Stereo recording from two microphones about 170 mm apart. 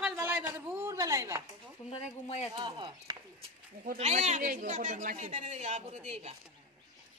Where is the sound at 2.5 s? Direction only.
25° right (ahead or behind).